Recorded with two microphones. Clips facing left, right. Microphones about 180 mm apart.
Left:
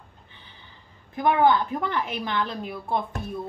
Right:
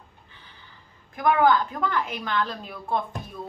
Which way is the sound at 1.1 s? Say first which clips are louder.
Even; 25° left (ahead or behind).